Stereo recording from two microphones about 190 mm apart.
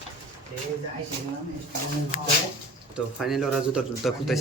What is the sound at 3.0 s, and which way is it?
Speech, centre (ahead or behind).